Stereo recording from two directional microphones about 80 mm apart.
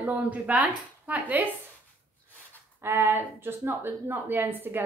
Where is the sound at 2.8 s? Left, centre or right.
Right.